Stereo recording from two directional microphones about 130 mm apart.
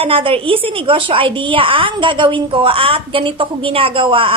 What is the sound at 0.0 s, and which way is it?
A woman's voice, 45° right (ahead or behind).